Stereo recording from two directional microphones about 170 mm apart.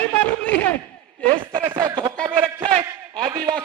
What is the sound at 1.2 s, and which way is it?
Speech, 30° right (ahead or behind).